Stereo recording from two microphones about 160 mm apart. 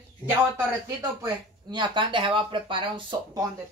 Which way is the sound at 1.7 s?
30° right (ahead or behind).